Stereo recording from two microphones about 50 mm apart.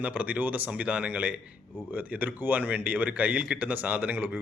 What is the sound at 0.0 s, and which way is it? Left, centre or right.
Speech, right.